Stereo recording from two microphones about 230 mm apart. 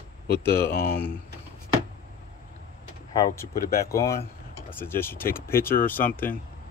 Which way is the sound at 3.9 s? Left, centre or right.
Centre.